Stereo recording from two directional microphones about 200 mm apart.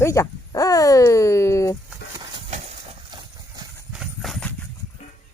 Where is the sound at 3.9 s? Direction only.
Centre (ahead or behind).